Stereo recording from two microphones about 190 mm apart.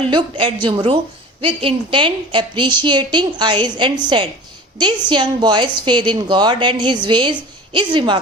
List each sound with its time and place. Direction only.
0.1 s a woman's voice: 25° right (ahead or behind)